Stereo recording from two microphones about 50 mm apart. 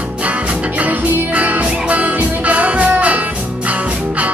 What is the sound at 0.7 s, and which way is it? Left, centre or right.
Music, right.